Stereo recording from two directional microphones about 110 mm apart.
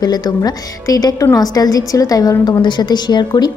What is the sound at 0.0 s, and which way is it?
A woman's voice, 40° left (ahead or behind).